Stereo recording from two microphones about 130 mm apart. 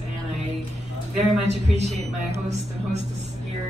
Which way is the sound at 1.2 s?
60° right (ahead or behind).